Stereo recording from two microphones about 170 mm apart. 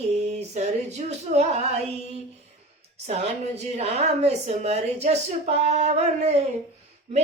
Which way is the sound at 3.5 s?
40° right (ahead or behind).